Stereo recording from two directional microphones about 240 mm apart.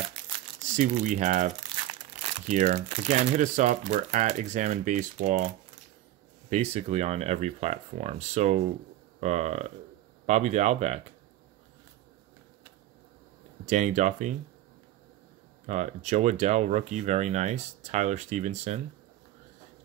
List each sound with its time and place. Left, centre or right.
0.6 s speech: right
6.5 s speech: right
13.7 s speech: right
15.6 s speech: right